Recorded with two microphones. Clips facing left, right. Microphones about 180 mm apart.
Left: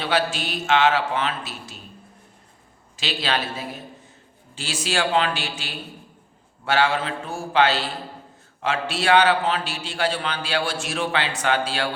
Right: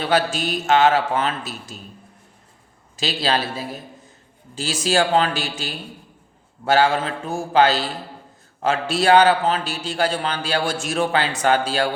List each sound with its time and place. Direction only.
0.0 s a man's voice: 45° right (ahead or behind)
2.9 s a man's voice: 40° right (ahead or behind)